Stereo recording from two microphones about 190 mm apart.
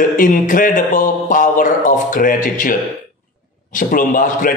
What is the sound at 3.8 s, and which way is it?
Speech, 45° left (ahead or behind).